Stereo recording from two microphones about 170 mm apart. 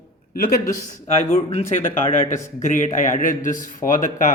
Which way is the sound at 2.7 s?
50° left (ahead or behind).